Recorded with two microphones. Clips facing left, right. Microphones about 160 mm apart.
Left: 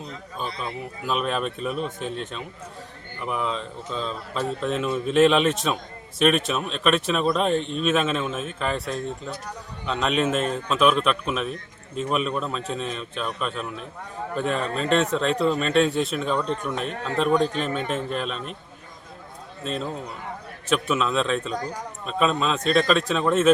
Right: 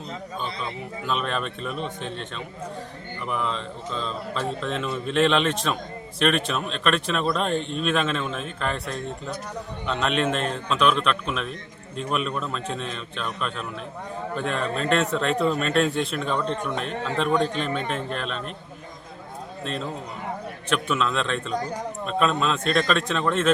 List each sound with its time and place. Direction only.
0.3 s speech: 5° left (ahead or behind)
19.6 s speech: centre (ahead or behind)